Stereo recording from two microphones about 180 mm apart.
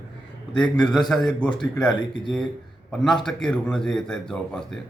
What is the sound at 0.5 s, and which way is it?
Speech, 5° left (ahead or behind).